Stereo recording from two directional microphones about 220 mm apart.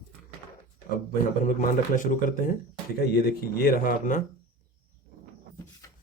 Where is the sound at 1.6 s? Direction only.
35° left (ahead or behind).